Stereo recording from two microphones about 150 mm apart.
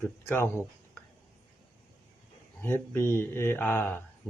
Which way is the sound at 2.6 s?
15° left (ahead or behind).